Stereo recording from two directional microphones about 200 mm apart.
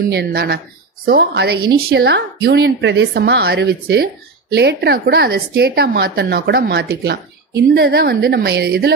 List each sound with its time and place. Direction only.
0.1 s speech: 50° right (ahead or behind)